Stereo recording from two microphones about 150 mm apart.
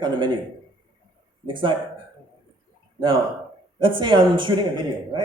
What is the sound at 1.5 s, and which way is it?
Speech, 35° right (ahead or behind).